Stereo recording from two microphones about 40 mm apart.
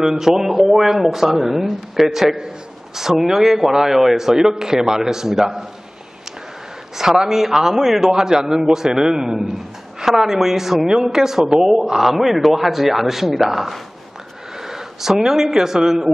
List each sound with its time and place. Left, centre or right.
0.0 s a man's voice: centre
2.2 s a man's voice: centre
7.0 s a man's voice: centre
8.1 s a man's voice: centre